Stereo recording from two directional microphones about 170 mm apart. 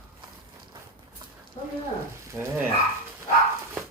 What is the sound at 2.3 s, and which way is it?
Frying, 15° right (ahead or behind).